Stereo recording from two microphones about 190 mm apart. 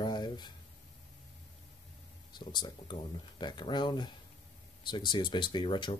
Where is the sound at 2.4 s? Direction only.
25° left (ahead or behind).